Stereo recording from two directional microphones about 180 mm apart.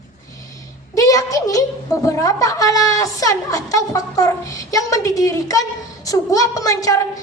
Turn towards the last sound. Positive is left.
turn(degrees=20)  # may be behind; listen again after turning